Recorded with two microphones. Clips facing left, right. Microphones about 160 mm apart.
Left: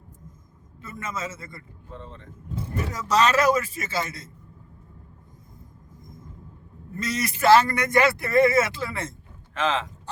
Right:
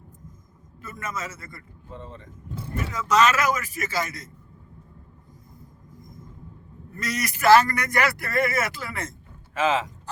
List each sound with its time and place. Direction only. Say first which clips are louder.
0.8 s a man's voice: left 1 dB; 25° left (ahead or behind)
1.9 s speech: right 1 dB; 10° right (ahead or behind)
2.7 s speech: right 1 dB; 35° left (ahead or behind)
6.9 s a man's voice: left 2 dB; 25° left (ahead or behind)
9.6 s speech: right 2 dB; 5° right (ahead or behind)